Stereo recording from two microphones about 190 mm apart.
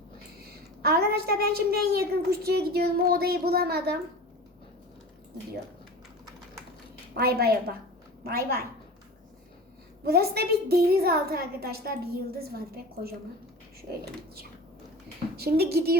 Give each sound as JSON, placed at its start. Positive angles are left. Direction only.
{"t": 0.8, "sound": "a woman's voice", "side_deg": -55}
{"t": 7.2, "sound": "a woman's voice", "side_deg": -55}
{"t": 10.1, "sound": "a woman's voice", "side_deg": -55}
{"t": 15.4, "sound": "a woman's voice", "side_deg": -55}